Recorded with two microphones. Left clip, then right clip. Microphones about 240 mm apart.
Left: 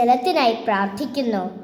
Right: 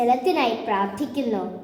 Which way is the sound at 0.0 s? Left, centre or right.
Left.